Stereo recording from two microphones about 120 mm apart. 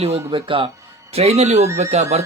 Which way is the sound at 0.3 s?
45° right (ahead or behind).